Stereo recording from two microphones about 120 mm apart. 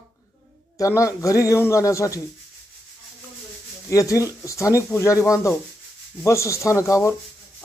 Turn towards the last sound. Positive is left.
turn(degrees=25)  # may be behind; listen again after turning